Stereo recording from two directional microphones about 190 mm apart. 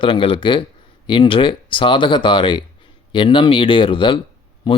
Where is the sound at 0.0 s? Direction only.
30° left (ahead or behind).